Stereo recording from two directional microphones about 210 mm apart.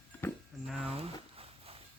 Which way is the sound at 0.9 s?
30° right (ahead or behind).